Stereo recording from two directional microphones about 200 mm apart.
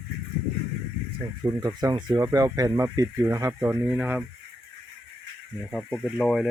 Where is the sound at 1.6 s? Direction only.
20° right (ahead or behind).